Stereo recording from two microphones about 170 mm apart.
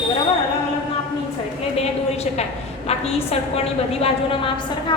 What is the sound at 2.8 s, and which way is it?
A woman's voice, 35° left (ahead or behind).